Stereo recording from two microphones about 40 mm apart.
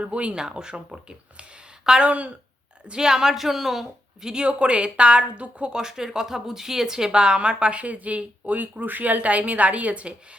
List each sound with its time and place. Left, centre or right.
0.0 s speech: right
0.3 s speech: centre
2.0 s speech: right
2.8 s speech: right
4.4 s speech: right
5.7 s speech: centre; by 10.2 s right